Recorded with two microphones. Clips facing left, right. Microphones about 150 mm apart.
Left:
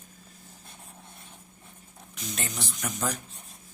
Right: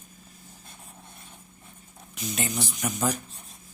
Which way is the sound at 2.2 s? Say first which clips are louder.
Right 5 dB; 5° right (ahead or behind).